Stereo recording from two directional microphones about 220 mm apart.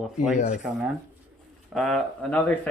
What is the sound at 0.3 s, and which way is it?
Speech, 30° left (ahead or behind).